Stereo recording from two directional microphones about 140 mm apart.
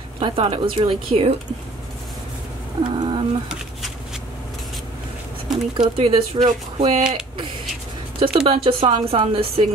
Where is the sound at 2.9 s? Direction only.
40° right (ahead or behind).